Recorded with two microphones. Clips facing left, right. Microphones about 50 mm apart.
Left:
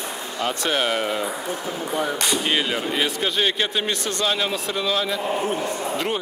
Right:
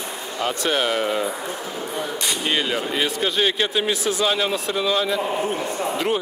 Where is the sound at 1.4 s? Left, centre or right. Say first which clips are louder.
Left 1 dB; centre.